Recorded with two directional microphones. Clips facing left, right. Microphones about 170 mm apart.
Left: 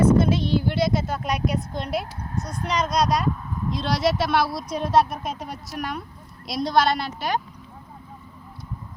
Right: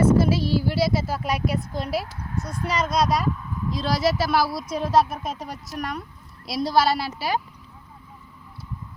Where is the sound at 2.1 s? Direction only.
35° left (ahead or behind).